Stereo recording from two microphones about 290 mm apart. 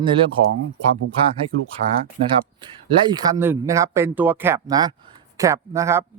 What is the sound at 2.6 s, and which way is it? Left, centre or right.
Speech, centre.